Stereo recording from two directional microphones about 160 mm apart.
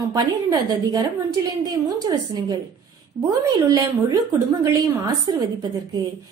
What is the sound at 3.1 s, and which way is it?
A woman's voice, 30° right (ahead or behind).